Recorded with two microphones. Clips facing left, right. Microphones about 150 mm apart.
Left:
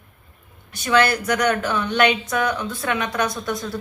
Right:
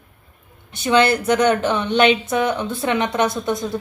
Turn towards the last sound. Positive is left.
turn(degrees=-20)  # may be behind; listen again after turning